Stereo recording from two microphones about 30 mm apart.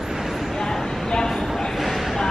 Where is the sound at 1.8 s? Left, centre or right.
Centre.